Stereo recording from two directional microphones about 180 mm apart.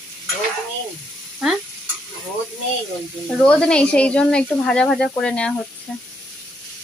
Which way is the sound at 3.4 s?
5° left (ahead or behind).